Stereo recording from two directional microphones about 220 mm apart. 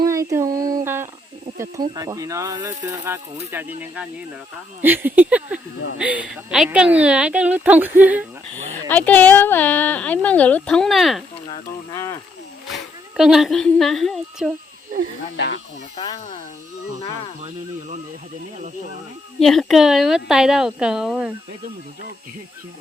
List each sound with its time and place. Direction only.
0.0 s a sound: 15° right (ahead or behind)
1.5 s a woman's voice: 15° right (ahead or behind)
8.5 s speech: 10° left (ahead or behind)
11.9 s speech: 15° left (ahead or behind)
13.1 s speech: centre (ahead or behind)
15.4 s speech: 50° left (ahead or behind)
17.4 s speech: 35° right (ahead or behind)
19.4 s speech: centre (ahead or behind)